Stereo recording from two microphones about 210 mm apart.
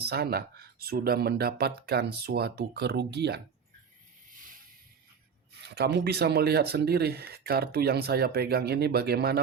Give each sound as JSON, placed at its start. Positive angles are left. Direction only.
{"t": 0.0, "sound": "speech", "side_deg": -50}
{"t": 5.5, "sound": "speech", "side_deg": -50}